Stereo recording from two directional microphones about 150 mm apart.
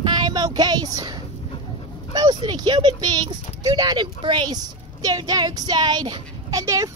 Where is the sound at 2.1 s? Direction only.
30° right (ahead or behind).